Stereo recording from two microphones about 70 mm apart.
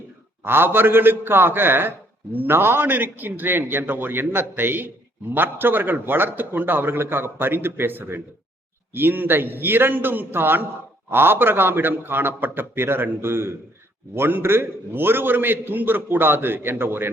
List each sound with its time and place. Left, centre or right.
0.4 s a man's voice: right